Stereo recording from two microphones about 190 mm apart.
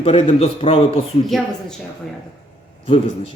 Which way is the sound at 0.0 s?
35° left (ahead or behind).